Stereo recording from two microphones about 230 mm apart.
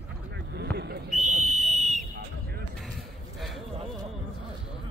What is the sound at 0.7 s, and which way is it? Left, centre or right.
Whistle, right.